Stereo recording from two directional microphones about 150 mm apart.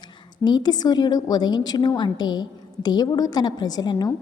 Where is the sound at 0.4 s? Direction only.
30° left (ahead or behind).